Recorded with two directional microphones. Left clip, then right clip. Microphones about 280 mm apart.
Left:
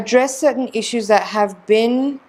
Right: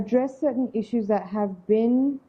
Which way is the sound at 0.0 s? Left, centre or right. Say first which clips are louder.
Left 9 dB; centre.